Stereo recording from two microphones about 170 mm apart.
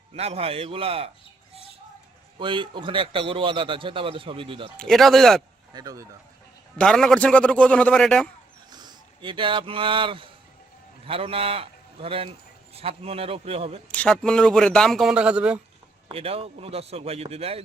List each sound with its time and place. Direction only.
0.1 s a man's voice: 35° right (ahead or behind)
2.4 s a man's voice: 30° right (ahead or behind)
4.8 s a man's voice: centre (ahead or behind)
5.7 s speech: 20° right (ahead or behind)
6.7 s a man's voice: 5° left (ahead or behind)
8.7 s a man's voice: 25° right (ahead or behind)
13.9 s a man's voice: 5° left (ahead or behind)
16.0 s a man's voice: 35° right (ahead or behind)